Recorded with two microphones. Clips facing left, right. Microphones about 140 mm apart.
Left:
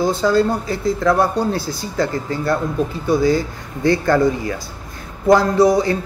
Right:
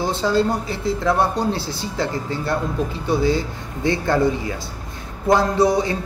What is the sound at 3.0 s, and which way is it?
Speech, 25° right (ahead or behind).